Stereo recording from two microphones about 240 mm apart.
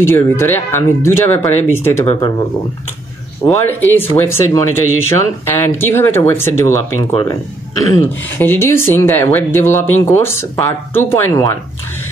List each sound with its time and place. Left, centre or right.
0.0 s speech: centre
3.4 s speech: centre
7.9 s speech: centre